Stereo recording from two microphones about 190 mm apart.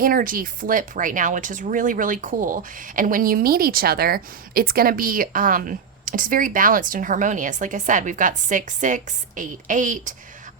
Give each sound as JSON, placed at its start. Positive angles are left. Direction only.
{"t": 0.0, "sound": "speech", "side_deg": -50}